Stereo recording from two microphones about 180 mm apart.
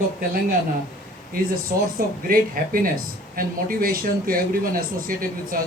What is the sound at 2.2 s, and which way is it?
Speech, 55° right (ahead or behind).